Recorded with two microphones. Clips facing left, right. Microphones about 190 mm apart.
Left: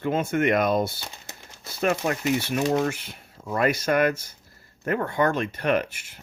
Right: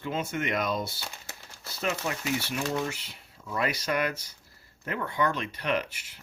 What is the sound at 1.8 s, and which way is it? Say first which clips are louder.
Speech: left 7 dB; 55° left (ahead or behind).